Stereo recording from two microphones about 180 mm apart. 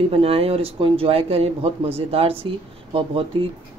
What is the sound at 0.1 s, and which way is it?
Speech, 35° right (ahead or behind).